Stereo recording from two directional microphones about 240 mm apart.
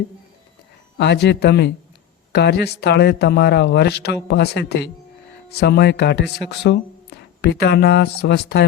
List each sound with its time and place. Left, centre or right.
0.9 s speech: left